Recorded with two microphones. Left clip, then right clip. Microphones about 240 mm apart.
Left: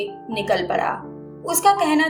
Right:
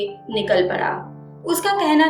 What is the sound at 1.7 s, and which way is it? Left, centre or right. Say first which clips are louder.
Speech: left 2 dB; left.